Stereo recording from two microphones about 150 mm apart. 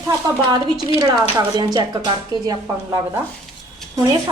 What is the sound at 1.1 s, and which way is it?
A woman's voice, 25° right (ahead or behind).